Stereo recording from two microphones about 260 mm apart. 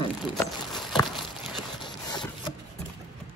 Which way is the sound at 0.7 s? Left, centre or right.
Centre.